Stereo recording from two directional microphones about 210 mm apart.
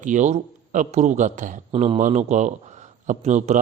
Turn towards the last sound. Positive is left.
turn(degrees=-35)  # may be behind; listen again after turning